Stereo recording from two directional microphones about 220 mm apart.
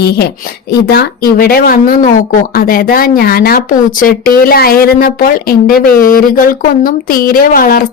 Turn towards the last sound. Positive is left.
turn(degrees=40)  # may be behind; listen again after turning